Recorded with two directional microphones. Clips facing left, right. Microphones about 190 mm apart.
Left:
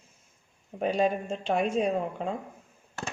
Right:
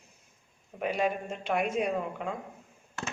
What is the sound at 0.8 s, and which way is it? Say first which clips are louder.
Speech: left 3 dB; 30° left (ahead or behind).